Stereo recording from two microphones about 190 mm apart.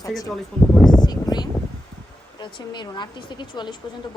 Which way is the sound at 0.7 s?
Centre (ahead or behind).